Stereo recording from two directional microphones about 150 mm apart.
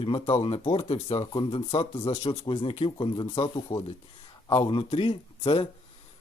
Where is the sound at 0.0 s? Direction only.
40° left (ahead or behind).